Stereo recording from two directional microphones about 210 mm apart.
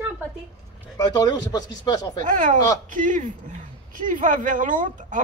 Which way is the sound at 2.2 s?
35° right (ahead or behind).